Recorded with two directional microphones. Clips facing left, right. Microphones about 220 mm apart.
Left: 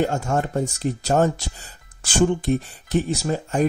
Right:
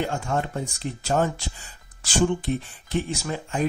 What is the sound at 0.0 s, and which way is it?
Speech, 45° left (ahead or behind).